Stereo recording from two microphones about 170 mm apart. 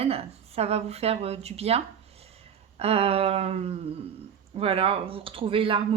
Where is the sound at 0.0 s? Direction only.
35° right (ahead or behind).